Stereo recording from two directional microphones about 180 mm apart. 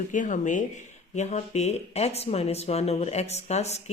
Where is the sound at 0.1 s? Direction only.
45° left (ahead or behind).